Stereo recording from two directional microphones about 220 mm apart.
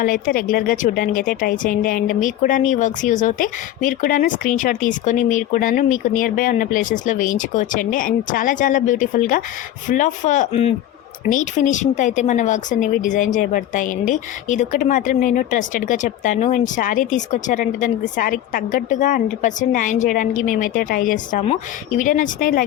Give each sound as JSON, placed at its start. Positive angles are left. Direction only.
{"t": 0.0, "sound": "speech", "side_deg": 40}